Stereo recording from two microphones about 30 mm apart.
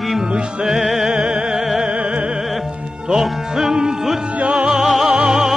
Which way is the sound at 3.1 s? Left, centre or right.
Centre.